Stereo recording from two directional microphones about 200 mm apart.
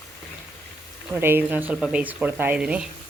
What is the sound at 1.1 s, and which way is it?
Speech, 10° right (ahead or behind).